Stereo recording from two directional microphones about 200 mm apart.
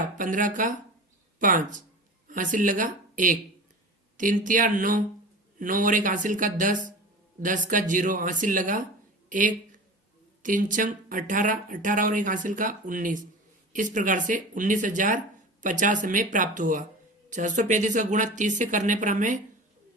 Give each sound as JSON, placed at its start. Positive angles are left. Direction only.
{"t": 0.0, "sound": "speech", "side_deg": -40}